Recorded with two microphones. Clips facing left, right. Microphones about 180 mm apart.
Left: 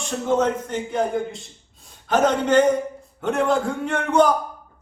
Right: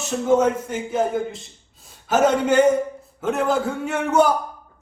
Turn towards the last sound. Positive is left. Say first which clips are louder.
# even
turn(degrees=-10)  # may be behind; listen again after turning